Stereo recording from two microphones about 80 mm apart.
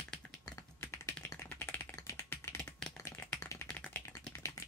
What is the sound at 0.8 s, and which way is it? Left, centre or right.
Typing, left.